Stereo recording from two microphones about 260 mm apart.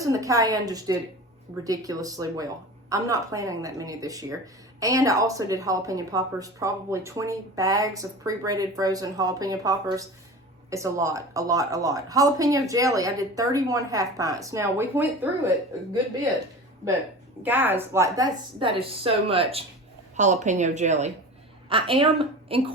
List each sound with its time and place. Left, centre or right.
0.0 s speech: centre
17.4 s a woman's voice: centre